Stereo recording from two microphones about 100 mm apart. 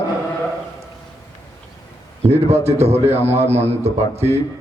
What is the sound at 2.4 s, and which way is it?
Speech, 90° right.